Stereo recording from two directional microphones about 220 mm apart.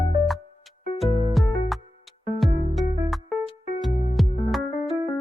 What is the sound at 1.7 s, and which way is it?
Music, centre (ahead or behind).